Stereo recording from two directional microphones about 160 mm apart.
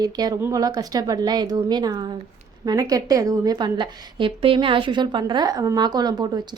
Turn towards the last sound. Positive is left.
turn(degrees=-25)  # may be behind; listen again after turning